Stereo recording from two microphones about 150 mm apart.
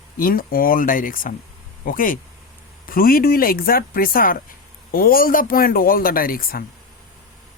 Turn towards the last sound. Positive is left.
turn(degrees=75)  # may be behind; listen again after turning